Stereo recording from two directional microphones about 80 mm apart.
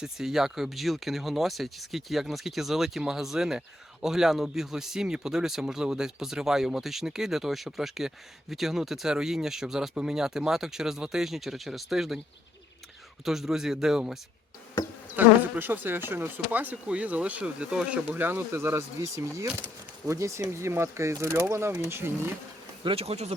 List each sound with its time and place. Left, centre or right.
0.0 s speech: centre
13.2 s speech: centre
15.1 s insect: right
20.1 s speech: right
22.8 s speech: right